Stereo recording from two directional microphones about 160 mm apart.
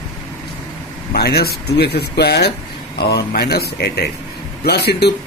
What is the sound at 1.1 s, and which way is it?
Speech, 85° left.